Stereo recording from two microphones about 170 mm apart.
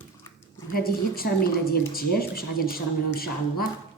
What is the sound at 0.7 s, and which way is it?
Speech, 60° left (ahead or behind).